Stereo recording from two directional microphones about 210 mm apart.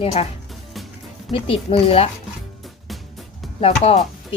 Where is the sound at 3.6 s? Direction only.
30° left (ahead or behind).